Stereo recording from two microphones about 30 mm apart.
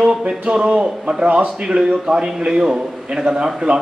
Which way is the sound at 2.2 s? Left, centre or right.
Right.